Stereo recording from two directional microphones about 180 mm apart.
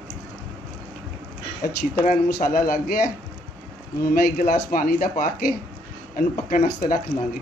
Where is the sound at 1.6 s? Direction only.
50° left (ahead or behind).